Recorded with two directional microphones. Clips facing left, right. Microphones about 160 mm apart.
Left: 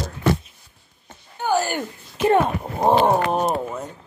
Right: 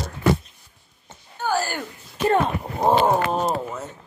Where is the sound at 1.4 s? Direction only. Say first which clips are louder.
Left 3 dB; 15° left (ahead or behind).